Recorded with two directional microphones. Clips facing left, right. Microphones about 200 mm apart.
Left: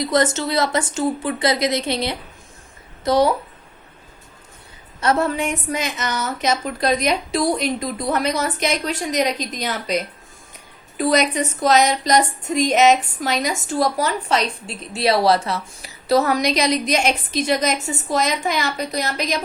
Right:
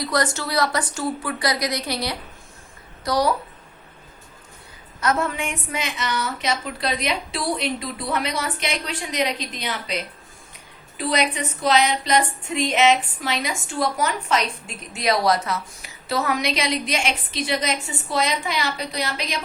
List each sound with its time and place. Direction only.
0.0 s speech: 20° left (ahead or behind)
4.9 s a woman's voice: 30° left (ahead or behind)